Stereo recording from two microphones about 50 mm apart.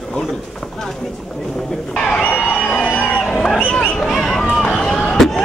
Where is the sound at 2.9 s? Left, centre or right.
Left.